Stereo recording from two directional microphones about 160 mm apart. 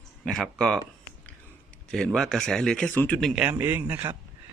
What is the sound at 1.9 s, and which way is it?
Speech, 5° left (ahead or behind).